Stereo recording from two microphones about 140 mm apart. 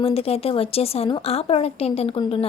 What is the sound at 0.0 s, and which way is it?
A woman's voice, 45° left (ahead or behind).